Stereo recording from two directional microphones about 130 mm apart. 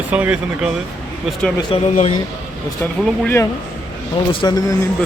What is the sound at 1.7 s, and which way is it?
Speech, 45° left (ahead or behind).